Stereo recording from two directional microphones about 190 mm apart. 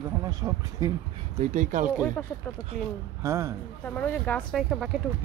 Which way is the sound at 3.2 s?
15° right (ahead or behind).